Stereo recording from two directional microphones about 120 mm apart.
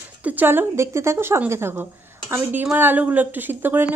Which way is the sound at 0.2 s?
15° right (ahead or behind).